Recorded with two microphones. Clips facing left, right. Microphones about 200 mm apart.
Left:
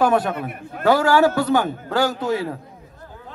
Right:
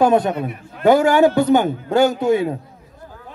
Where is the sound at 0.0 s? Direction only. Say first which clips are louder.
Right 3 dB; 20° right (ahead or behind).